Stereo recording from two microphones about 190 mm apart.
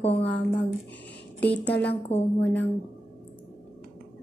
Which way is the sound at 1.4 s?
10° left (ahead or behind).